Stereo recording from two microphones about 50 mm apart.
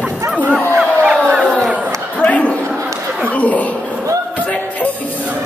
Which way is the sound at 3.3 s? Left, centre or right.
Left.